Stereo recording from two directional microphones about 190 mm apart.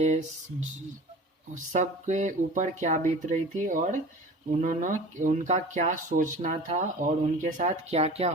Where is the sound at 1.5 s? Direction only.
40° right (ahead or behind).